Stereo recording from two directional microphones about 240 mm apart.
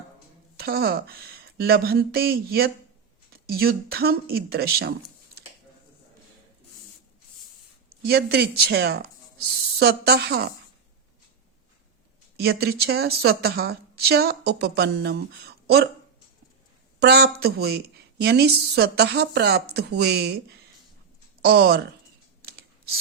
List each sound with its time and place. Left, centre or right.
0.6 s a woman's voice: right
8.0 s a woman's voice: right
12.4 s a woman's voice: right
17.0 s a woman's voice: right
22.4 s scissors: right